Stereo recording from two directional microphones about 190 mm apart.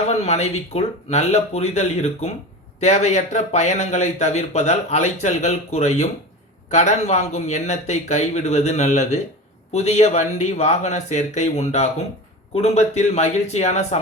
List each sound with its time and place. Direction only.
0.1 s speech: 35° left (ahead or behind)